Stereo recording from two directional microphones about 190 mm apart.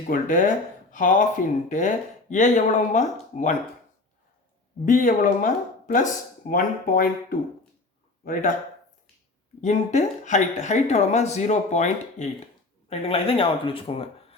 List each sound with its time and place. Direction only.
0.1 s speech: 45° left (ahead or behind)
2.3 s speech: 40° left (ahead or behind)
4.9 s speech: 45° left (ahead or behind)
9.6 s speech: 40° left (ahead or behind)